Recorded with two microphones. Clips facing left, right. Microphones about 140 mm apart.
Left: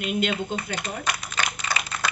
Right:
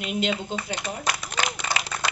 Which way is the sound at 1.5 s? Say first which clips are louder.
Right 1 dB; 75° right (ahead or behind).